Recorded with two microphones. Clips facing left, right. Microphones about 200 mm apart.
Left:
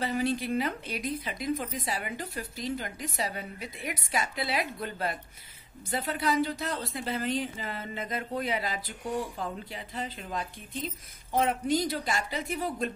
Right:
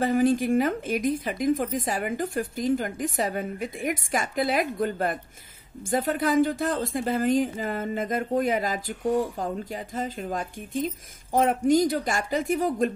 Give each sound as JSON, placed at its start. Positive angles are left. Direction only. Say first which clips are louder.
{"t": 0.0, "sound": "a woman's voice", "louder": "right 8 dB", "side_deg": -50}